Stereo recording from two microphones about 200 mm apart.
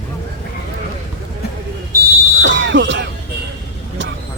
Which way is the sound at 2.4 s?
65° right (ahead or behind).